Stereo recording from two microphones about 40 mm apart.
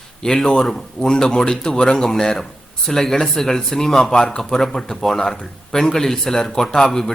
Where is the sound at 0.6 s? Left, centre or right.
Centre.